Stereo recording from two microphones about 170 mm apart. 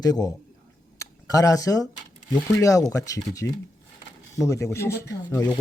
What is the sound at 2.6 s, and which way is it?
Speech, 20° left (ahead or behind).